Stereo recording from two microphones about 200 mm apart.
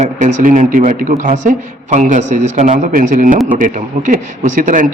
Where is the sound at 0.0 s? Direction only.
40° right (ahead or behind).